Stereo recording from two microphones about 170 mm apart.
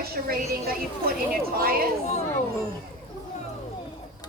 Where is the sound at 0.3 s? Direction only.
60° right (ahead or behind).